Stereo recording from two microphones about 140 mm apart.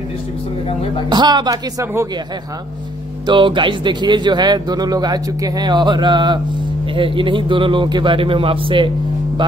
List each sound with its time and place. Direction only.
1.0 s speech: 30° right (ahead or behind)
3.3 s speech: 35° right (ahead or behind)